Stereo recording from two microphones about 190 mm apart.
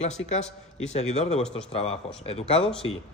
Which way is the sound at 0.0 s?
35° left (ahead or behind).